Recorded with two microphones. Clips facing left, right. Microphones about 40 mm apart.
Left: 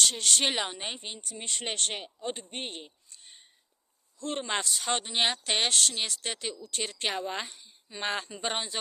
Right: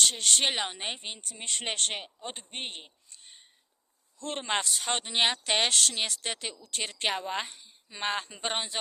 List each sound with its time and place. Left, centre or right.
0.0 s speech: centre
0.7 s speech: right
1.0 s speech: right
2.2 s speech: right
2.6 s speech: right
4.2 s speech: right
5.0 s speech: right
6.6 s speech: right
8.0 s speech: right